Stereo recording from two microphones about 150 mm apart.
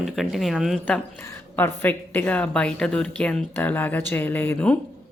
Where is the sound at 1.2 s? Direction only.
15° left (ahead or behind).